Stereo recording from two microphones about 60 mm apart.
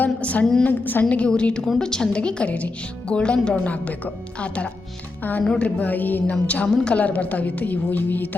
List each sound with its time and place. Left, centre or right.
0.0 s a woman's voice: left
1.0 s a woman's voice: centre